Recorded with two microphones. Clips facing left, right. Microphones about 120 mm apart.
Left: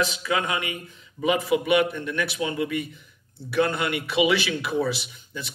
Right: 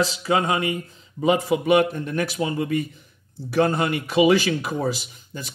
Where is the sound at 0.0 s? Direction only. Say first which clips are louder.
Right 4 dB; 35° right (ahead or behind).